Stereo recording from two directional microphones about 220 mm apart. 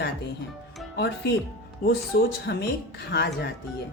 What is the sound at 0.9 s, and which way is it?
Speech, 50° left (ahead or behind).